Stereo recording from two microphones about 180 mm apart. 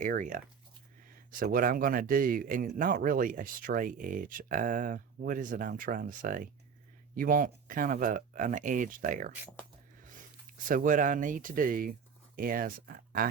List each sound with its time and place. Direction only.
0.0 s speech: 45° right (ahead or behind)
10.7 s speech: 50° right (ahead or behind)